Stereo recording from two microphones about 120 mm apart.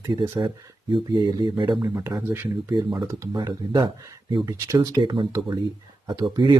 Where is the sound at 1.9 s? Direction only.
20° right (ahead or behind); by 5.3 s 45° right (ahead or behind).